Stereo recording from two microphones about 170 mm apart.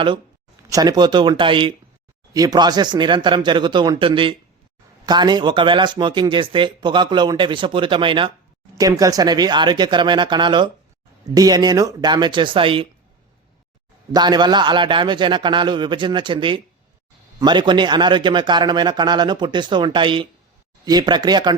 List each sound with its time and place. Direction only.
0.7 s speech: 25° right (ahead or behind)
14.1 s speech: 25° right (ahead or behind)